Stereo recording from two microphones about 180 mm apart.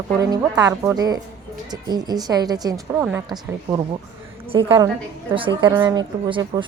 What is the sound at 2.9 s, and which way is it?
Speech, 5° right (ahead or behind).